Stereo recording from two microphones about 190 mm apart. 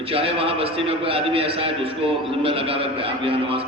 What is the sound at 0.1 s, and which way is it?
A man's voice, 30° right (ahead or behind).